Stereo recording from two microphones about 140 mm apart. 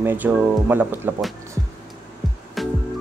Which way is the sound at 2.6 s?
Centre (ahead or behind).